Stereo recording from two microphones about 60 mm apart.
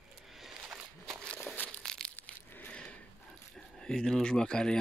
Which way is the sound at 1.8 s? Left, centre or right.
Centre.